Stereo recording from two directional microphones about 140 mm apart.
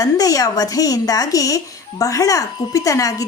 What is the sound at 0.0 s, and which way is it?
A woman's voice, 25° left (ahead or behind).